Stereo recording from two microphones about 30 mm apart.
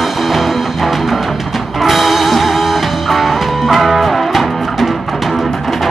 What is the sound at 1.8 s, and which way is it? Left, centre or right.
Music, centre.